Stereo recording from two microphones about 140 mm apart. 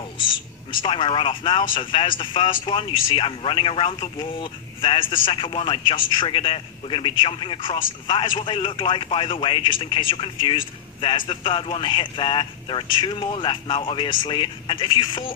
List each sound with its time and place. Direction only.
0.7 s speech: 35° left (ahead or behind)